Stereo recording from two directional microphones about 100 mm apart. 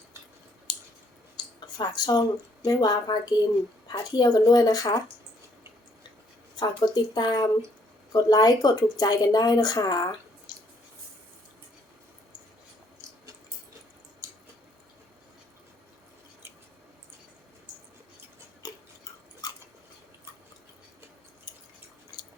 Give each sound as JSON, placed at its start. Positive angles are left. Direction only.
{"t": 0.7, "sound": "a sound", "side_deg": 45}
{"t": 2.6, "sound": "a woman's voice", "side_deg": 40}
{"t": 6.6, "sound": "a woman's voice", "side_deg": 45}
{"t": 14.2, "sound": "squish", "side_deg": -30}
{"t": 19.4, "sound": "chewing", "side_deg": 40}